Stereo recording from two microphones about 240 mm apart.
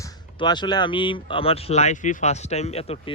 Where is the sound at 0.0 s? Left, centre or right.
Centre.